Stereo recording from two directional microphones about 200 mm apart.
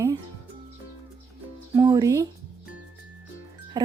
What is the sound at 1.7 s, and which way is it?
Speech, 20° right (ahead or behind).